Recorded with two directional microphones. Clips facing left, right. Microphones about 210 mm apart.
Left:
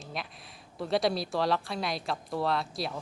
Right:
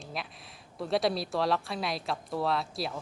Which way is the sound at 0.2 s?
Centre (ahead or behind).